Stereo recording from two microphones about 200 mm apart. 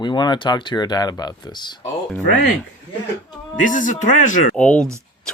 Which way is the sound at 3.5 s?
40° left (ahead or behind).